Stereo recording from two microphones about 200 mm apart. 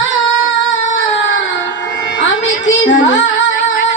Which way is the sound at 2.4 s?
70° left (ahead or behind).